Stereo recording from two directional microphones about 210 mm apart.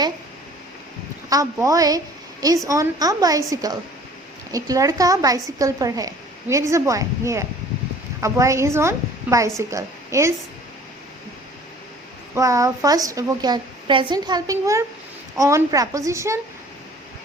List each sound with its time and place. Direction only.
1.3 s a woman's voice: 15° right (ahead or behind)
12.3 s a woman's voice: 15° right (ahead or behind)